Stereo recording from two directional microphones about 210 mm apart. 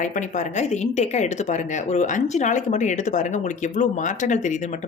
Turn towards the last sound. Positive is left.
turn(degrees=35)  # may be behind; listen again after turning